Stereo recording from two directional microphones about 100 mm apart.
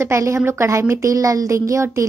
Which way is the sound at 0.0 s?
30° right (ahead or behind).